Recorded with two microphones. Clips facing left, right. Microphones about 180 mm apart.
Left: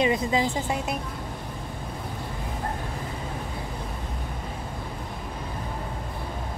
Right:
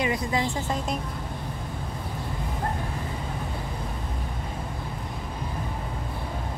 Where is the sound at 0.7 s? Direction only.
10° left (ahead or behind).